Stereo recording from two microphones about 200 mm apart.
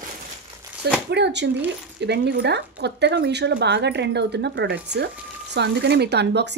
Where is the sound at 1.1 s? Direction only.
60° right (ahead or behind).